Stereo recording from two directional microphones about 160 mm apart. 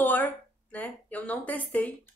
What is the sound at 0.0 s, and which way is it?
Speech, 10° left (ahead or behind).